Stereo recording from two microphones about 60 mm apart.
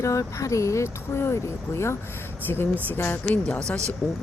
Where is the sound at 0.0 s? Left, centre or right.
Left.